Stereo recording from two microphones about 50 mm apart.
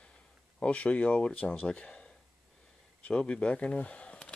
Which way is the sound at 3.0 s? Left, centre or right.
Centre.